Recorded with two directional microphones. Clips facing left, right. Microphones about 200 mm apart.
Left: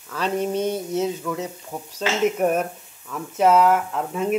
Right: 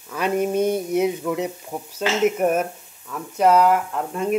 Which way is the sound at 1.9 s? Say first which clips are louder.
Right 1 dB; 5° right (ahead or behind).